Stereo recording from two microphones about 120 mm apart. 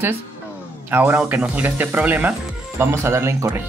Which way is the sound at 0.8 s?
15° right (ahead or behind).